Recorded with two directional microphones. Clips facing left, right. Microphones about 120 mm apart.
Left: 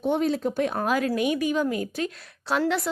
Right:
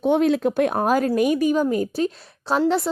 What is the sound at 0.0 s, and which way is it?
Speech, 70° right (ahead or behind).